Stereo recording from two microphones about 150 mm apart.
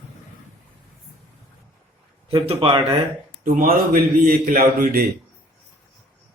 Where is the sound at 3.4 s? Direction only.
60° right (ahead or behind); by 5.0 s 90° right.